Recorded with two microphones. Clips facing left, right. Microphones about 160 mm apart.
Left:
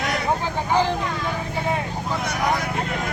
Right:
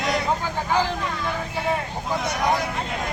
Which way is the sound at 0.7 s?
20° left (ahead or behind).